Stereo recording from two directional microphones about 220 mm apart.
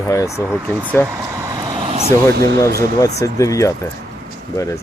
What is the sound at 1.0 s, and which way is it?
Vehicle, 10° right (ahead or behind).